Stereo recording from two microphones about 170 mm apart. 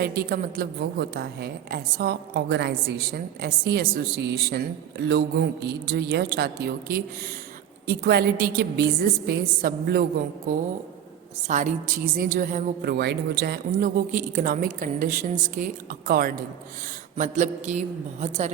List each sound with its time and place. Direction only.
0.2 s a woman's voice: 65° right (ahead or behind)
7.9 s a woman's voice: 65° right (ahead or behind)
11.4 s a woman's voice: 45° right (ahead or behind); by 13.9 s 75° right (ahead or behind)
14.1 s a woman's voice: 50° right (ahead or behind)
17.2 s a woman's voice: 45° right (ahead or behind)